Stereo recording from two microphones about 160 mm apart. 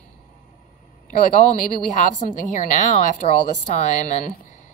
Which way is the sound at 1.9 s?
50° left (ahead or behind).